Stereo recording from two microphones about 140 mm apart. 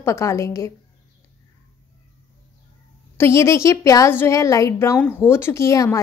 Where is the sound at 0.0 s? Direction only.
20° left (ahead or behind).